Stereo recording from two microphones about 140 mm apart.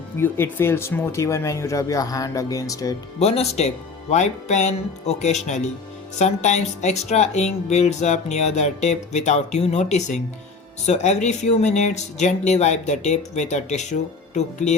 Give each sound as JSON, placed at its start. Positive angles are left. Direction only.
{"t": 0.2, "sound": "speech", "side_deg": 15}
{"t": 3.2, "sound": "speech", "side_deg": 50}